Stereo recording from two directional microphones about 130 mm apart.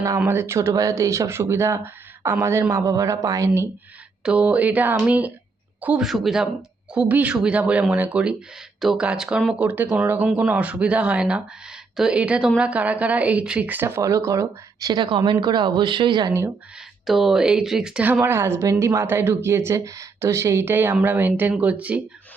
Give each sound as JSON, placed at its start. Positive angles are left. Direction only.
{"t": 0.2, "sound": "speech", "side_deg": -20}
{"t": 4.2, "sound": "speech", "side_deg": -10}
{"t": 17.1, "sound": "speech", "side_deg": 0}